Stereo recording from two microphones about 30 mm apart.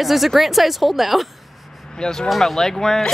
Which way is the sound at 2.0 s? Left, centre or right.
Left.